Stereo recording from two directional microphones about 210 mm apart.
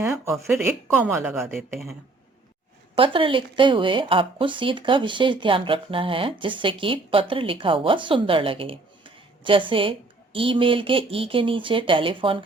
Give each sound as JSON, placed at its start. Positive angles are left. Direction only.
{"t": 0.0, "sound": "speech", "side_deg": -15}
{"t": 2.9, "sound": "a woman's voice", "side_deg": -25}